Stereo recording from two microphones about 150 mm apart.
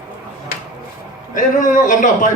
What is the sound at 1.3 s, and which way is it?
Speech, 60° left (ahead or behind).